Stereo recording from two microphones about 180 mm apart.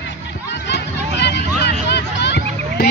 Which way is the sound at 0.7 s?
70° left (ahead or behind).